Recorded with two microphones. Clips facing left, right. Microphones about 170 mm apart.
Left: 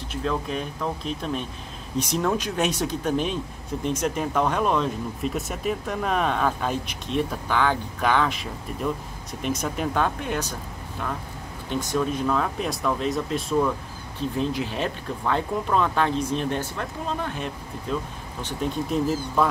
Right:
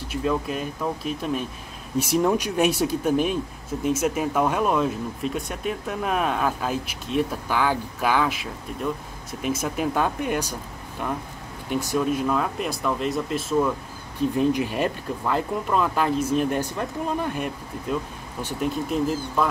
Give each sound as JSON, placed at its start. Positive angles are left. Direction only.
{"t": 0.1, "sound": "speech", "side_deg": -10}
{"t": 11.7, "sound": "speech", "side_deg": -10}
{"t": 14.4, "sound": "speech", "side_deg": -15}